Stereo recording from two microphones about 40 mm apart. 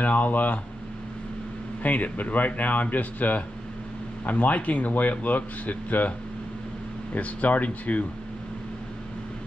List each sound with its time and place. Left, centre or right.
0.0 s speech: left
1.8 s speech: left
7.2 s speech: left